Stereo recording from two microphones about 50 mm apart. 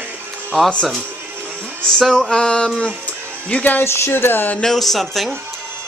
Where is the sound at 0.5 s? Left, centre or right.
Centre.